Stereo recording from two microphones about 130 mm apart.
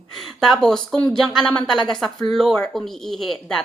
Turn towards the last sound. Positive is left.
turn(degrees=5)  # may be behind; listen again after turning